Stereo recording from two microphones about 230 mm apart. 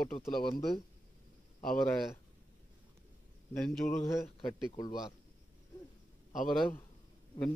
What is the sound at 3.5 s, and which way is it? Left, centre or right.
Speech, centre.